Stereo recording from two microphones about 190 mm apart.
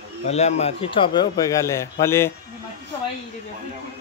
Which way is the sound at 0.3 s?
35° left (ahead or behind).